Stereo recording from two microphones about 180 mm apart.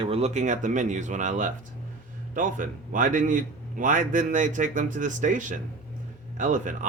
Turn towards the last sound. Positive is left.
turn(degrees=-45)  # may be behind; listen again after turning